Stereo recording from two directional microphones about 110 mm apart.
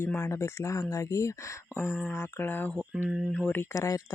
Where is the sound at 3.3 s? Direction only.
15° left (ahead or behind).